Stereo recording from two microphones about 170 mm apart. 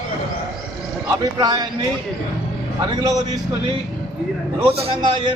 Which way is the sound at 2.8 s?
20° right (ahead or behind).